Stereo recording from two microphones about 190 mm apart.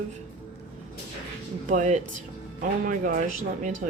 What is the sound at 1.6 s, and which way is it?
Speech, 40° right (ahead or behind).